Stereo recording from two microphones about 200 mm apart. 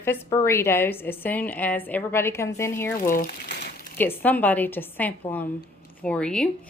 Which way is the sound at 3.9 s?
10° left (ahead or behind).